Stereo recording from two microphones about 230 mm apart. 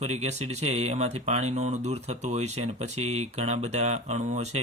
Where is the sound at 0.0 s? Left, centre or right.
Right.